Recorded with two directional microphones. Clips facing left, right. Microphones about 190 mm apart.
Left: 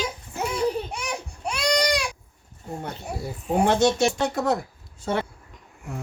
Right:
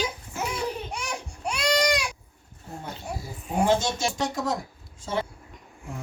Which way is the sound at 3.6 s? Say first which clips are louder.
Left 4 dB; 65° left (ahead or behind).